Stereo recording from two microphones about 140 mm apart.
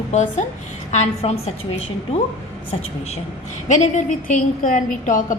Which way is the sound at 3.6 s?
60° left (ahead or behind).